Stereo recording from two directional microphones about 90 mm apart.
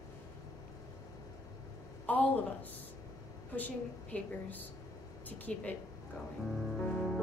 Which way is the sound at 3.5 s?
20° left (ahead or behind).